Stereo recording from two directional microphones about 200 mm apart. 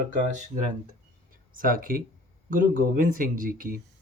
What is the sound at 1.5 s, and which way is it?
Speech, 45° right (ahead or behind).